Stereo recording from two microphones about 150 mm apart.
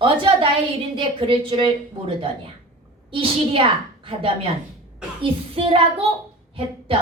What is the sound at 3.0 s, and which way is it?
Speech, 35° right (ahead or behind).